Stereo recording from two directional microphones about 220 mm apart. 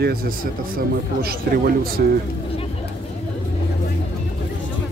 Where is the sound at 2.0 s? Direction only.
45° right (ahead or behind).